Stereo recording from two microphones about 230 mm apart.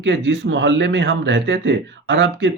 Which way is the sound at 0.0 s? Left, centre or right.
Right.